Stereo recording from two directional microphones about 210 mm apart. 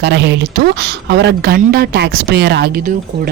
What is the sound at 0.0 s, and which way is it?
Speech, 55° right (ahead or behind).